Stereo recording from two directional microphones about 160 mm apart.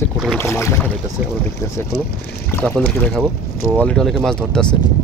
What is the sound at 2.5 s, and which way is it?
Speech, 10° left (ahead or behind).